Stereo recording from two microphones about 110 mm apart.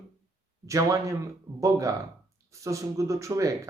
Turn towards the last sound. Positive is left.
turn(degrees=-30)  # may be behind; listen again after turning